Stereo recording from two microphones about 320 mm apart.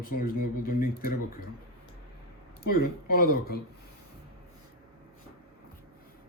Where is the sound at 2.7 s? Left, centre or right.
Left.